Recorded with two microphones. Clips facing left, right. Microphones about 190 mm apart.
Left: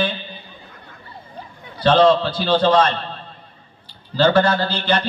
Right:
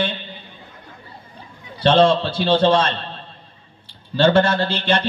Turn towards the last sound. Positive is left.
turn(degrees=-25)  # may be behind; listen again after turning